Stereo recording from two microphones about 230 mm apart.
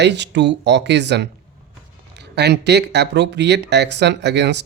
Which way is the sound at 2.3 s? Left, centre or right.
Right.